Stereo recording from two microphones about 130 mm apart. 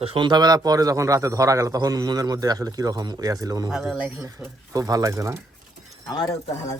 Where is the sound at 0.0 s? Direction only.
40° right (ahead or behind).